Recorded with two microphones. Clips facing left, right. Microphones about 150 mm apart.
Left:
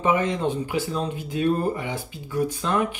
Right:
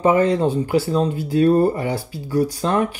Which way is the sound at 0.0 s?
40° right (ahead or behind).